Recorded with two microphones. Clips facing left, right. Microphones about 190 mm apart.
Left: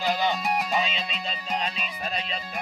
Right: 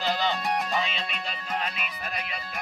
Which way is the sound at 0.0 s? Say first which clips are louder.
Left 2 dB; 10° left (ahead or behind).